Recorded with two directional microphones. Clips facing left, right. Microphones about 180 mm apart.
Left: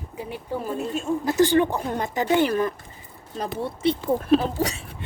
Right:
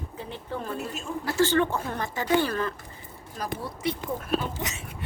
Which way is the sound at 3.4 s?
25° left (ahead or behind).